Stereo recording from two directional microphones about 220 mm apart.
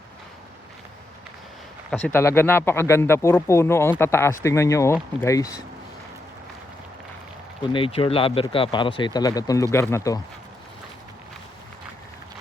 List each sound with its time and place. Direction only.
1.9 s speech: 5° left (ahead or behind)
7.7 s speech: 25° left (ahead or behind)